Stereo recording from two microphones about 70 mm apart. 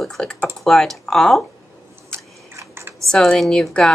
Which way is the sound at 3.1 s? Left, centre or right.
Centre.